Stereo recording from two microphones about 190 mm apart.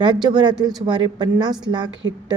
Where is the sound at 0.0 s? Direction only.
25° right (ahead or behind).